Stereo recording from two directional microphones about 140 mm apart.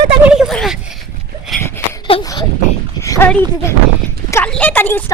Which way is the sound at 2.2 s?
25° left (ahead or behind).